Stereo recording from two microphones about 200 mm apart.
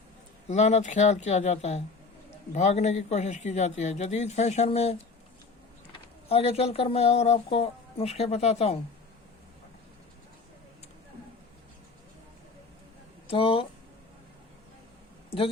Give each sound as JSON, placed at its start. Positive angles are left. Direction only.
{"t": 0.4, "sound": "speech", "side_deg": 35}
{"t": 6.2, "sound": "speech", "side_deg": 30}
{"t": 13.2, "sound": "speech", "side_deg": 25}